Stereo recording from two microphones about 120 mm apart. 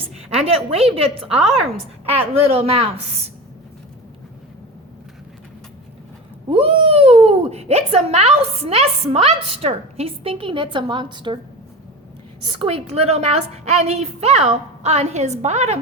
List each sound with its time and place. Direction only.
0.3 s speech: 55° right (ahead or behind)
2.1 s speech: 55° right (ahead or behind)
6.5 s speech: 55° right (ahead or behind)
12.5 s speech: 60° right (ahead or behind)